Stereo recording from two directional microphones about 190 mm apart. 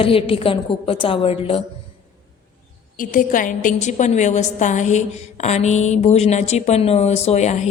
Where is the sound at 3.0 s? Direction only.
45° left (ahead or behind).